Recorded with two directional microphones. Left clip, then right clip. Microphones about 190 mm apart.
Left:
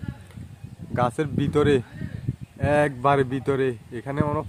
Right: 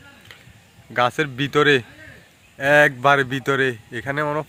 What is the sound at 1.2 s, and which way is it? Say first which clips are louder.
A man's voice: right 4 dB; 10° left (ahead or behind).